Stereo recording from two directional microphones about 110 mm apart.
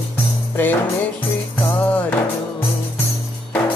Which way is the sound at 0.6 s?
15° left (ahead or behind).